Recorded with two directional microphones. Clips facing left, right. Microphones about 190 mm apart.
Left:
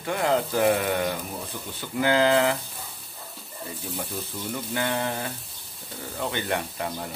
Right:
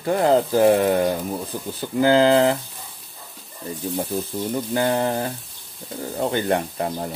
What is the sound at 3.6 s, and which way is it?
Speech, 35° right (ahead or behind).